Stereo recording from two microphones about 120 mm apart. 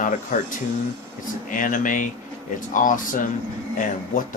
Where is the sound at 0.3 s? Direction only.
90° left.